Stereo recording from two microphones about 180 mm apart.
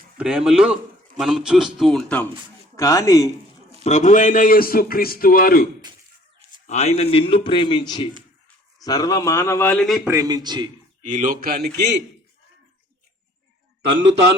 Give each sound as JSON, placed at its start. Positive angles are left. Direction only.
{"t": 0.2, "sound": "a man's voice", "side_deg": -5}
{"t": 2.7, "sound": "a man's voice", "side_deg": 15}
{"t": 3.8, "sound": "a man's voice", "side_deg": 40}
{"t": 6.7, "sound": "a man's voice", "side_deg": 35}
{"t": 10.1, "sound": "a man's voice", "side_deg": -20}
{"t": 11.0, "sound": "a man's voice", "side_deg": -45}